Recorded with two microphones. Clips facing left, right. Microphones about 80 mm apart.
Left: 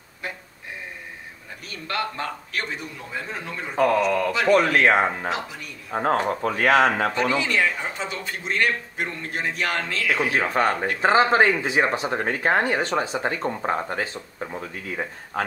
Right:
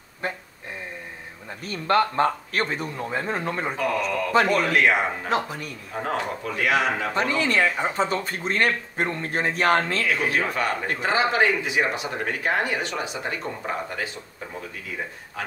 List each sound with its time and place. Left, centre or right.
1.7 s speech: right
3.7 s speech: left
5.3 s speech: right
5.9 s speech: left
7.3 s speech: right
10.3 s speech: left